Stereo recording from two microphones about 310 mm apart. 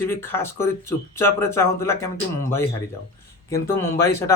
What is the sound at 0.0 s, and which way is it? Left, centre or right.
Speech, centre.